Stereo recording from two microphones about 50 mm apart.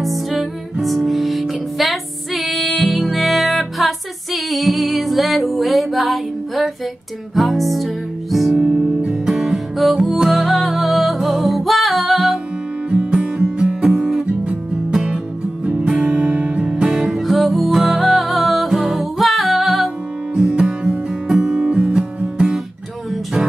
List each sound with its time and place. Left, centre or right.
0.0 s music: centre
8.5 s music: centre
12.9 s music: right
17.2 s music: centre
20.3 s music: centre